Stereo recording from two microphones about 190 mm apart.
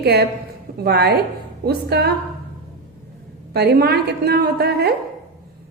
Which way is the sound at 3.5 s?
60° right (ahead or behind).